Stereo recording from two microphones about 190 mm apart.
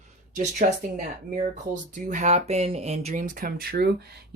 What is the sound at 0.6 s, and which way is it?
Speech, 45° right (ahead or behind).